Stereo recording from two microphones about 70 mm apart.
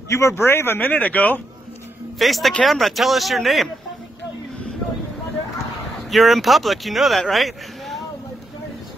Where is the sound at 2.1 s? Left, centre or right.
Centre.